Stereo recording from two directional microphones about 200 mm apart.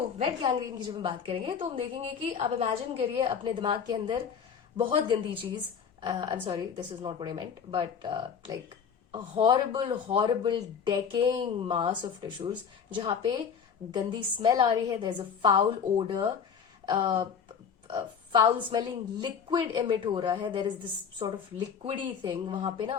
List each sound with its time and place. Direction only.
0.6 s speech: 25° right (ahead or behind)
21.8 s speech: 25° right (ahead or behind)